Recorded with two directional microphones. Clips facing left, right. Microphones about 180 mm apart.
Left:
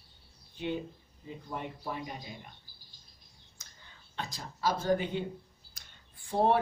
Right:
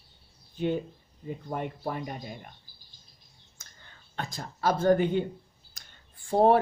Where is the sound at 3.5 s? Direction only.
50° right (ahead or behind).